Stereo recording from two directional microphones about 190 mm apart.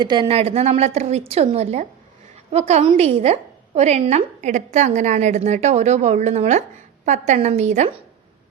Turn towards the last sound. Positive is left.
turn(degrees=-35)  # may be behind; listen again after turning